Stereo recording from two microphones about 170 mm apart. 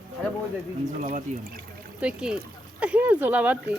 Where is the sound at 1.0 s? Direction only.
55° right (ahead or behind).